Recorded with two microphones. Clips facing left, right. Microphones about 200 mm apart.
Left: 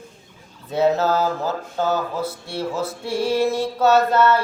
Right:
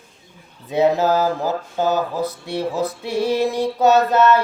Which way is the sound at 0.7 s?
15° right (ahead or behind).